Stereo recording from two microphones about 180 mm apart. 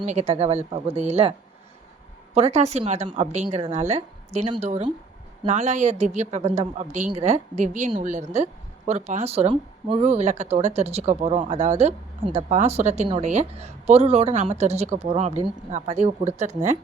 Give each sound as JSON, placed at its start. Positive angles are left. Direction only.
{"t": 0.0, "sound": "speech", "side_deg": -40}
{"t": 2.3, "sound": "speech", "side_deg": -35}